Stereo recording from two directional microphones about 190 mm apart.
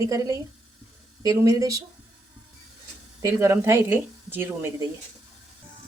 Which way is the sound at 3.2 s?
15° right (ahead or behind).